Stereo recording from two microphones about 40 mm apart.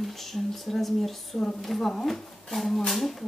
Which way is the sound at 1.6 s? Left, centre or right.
Centre.